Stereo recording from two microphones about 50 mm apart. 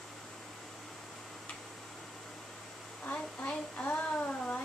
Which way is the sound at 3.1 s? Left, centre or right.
Left.